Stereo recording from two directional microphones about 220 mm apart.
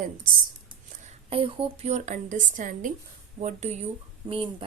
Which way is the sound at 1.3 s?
25° right (ahead or behind).